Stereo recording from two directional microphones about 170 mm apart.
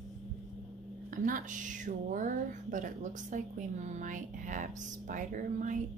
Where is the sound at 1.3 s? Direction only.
50° right (ahead or behind).